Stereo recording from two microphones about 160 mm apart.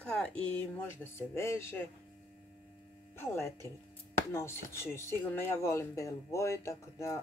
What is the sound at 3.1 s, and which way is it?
A woman's voice, 15° left (ahead or behind).